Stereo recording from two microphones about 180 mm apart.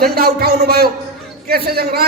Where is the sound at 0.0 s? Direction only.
60° right (ahead or behind).